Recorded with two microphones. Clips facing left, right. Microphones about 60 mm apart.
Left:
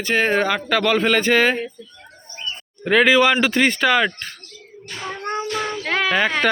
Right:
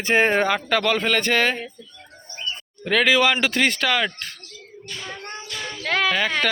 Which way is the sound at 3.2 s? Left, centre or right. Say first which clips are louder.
Left 3 dB; centre.